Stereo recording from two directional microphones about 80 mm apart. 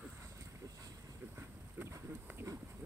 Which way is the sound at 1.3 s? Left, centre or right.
Right.